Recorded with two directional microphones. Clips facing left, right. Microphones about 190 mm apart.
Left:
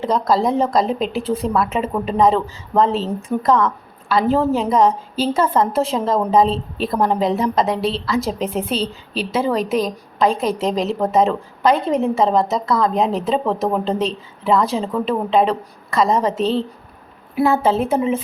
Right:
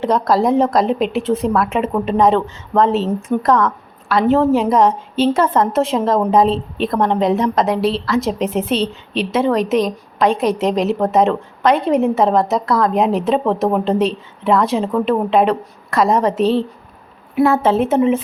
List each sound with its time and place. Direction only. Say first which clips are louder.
0.0 s a woman's voice: right 2 dB; centre (ahead or behind)
8.6 s a woman's voice: right 4 dB; 30° left (ahead or behind)
8.9 s a woman's voice: right 3 dB; centre (ahead or behind)
17.3 s a woman's voice: right 2 dB; centre (ahead or behind)